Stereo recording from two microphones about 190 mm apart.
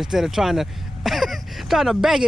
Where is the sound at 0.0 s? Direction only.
Centre (ahead or behind).